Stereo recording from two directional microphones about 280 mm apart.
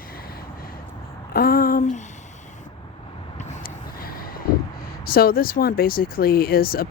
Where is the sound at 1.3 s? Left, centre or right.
Left.